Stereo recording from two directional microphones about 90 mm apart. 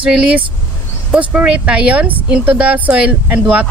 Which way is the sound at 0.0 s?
10° right (ahead or behind).